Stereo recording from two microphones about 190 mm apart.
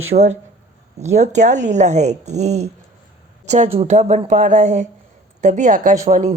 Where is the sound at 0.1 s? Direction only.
35° right (ahead or behind).